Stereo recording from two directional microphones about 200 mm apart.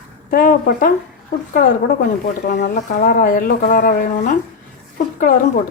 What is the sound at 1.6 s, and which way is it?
Speech, 55° left (ahead or behind).